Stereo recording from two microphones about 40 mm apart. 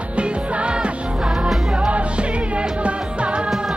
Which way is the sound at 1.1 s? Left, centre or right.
Centre.